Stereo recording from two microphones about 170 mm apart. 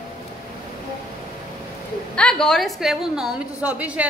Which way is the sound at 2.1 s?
5° left (ahead or behind).